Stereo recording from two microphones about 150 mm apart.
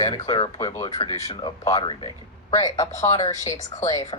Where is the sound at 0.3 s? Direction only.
35° left (ahead or behind).